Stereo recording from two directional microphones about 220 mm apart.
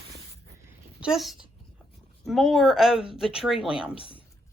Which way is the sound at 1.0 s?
Centre (ahead or behind).